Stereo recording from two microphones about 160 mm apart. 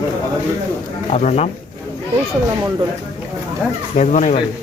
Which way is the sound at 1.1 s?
45° left (ahead or behind).